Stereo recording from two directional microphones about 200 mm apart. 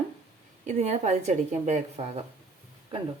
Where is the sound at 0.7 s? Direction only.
35° right (ahead or behind).